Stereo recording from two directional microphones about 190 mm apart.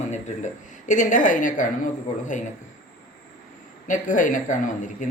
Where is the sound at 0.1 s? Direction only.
40° left (ahead or behind).